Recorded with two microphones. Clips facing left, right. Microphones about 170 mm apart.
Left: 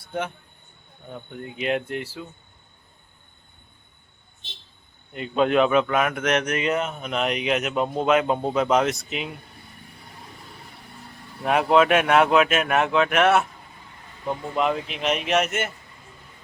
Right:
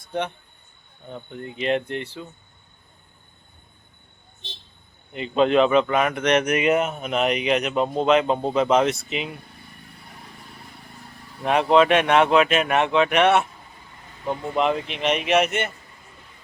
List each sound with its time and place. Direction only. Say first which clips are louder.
1.1 s speech: right 1 dB; 5° left (ahead or behind)
5.1 s speech: right 2 dB; centre (ahead or behind)
6.4 s speech: right 4 dB; 10° right (ahead or behind)
11.4 s speech: right 1 dB; 5° left (ahead or behind)